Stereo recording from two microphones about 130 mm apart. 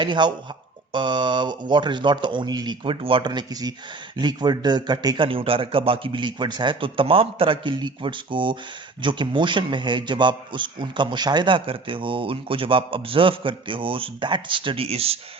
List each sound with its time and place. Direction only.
0.0 s a man's voice: 35° right (ahead or behind)